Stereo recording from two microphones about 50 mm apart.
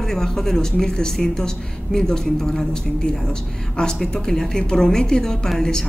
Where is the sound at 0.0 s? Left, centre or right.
Centre.